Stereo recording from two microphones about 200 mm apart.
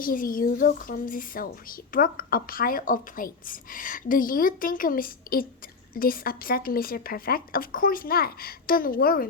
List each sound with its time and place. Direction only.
0.0 s speech: 45° left (ahead or behind)